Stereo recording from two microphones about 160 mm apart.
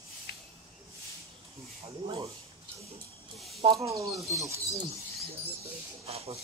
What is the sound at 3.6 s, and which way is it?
Speech, 35° right (ahead or behind).